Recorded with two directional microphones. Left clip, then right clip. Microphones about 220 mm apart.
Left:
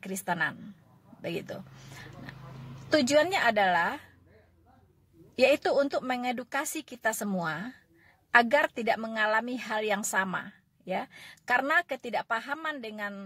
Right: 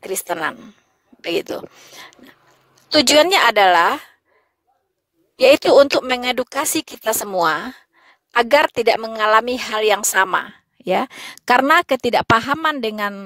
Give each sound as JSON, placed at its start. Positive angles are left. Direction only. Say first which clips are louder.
{"t": 0.0, "sound": "speech", "louder": "right 8 dB", "side_deg": -45}
{"t": 2.9, "sound": "speech", "louder": "right 11 dB", "side_deg": -45}
{"t": 5.4, "sound": "speech", "louder": "right 13 dB", "side_deg": -45}